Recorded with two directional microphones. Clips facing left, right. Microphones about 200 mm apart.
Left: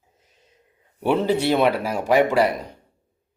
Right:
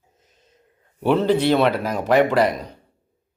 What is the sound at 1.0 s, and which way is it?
A man's voice, 10° left (ahead or behind).